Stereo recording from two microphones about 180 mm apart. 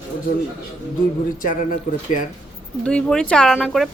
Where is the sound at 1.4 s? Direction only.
50° left (ahead or behind).